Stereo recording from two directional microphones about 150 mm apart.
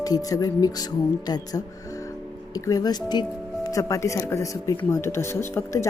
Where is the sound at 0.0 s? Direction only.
25° left (ahead or behind).